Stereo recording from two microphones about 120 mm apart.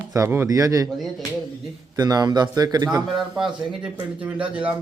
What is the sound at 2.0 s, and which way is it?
Speech, 35° right (ahead or behind).